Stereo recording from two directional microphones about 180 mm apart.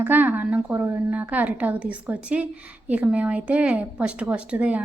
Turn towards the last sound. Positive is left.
turn(degrees=-5)  # may be behind; listen again after turning